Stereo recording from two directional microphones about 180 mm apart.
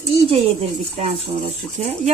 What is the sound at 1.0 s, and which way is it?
Speech, 40° right (ahead or behind).